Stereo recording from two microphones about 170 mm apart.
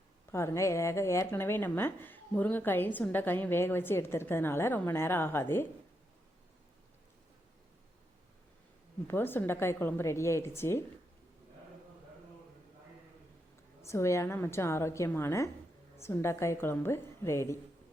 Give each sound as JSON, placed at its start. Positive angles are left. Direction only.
{"t": 0.3, "sound": "a woman's voice", "side_deg": 15}
{"t": 9.0, "sound": "a woman's voice", "side_deg": 10}
{"t": 13.8, "sound": "a woman's voice", "side_deg": 15}